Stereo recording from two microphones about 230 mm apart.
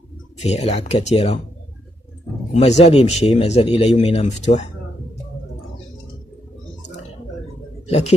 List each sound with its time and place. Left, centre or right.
0.4 s speech: left
2.5 s speech: left